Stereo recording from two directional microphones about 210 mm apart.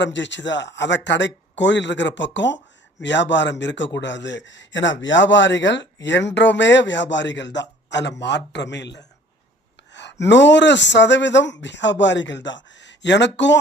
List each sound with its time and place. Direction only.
0.0 s speech: 60° left (ahead or behind)